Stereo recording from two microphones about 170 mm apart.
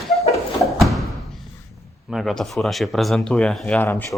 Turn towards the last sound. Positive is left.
turn(degrees=10)  # may be behind; listen again after turning